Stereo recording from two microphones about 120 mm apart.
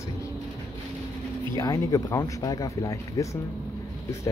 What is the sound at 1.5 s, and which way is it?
Speech, 25° left (ahead or behind).